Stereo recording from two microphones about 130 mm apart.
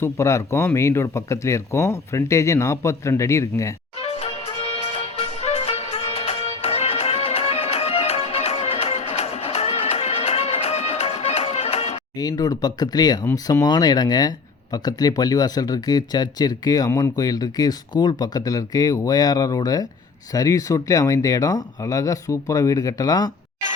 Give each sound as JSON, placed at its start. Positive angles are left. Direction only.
{"t": 0.0, "sound": "speech", "side_deg": 20}
{"t": 4.0, "sound": "music", "side_deg": 50}
{"t": 12.1, "sound": "speech", "side_deg": 30}